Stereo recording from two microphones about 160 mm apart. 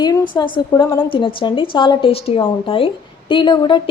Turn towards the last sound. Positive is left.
turn(degrees=30)  # may be behind; listen again after turning